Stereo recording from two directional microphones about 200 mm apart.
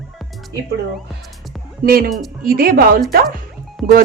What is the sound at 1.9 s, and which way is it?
Speech, 45° right (ahead or behind).